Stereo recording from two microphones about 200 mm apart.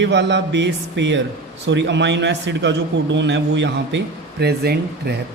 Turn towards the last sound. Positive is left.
turn(degrees=-55)  # may be behind; listen again after turning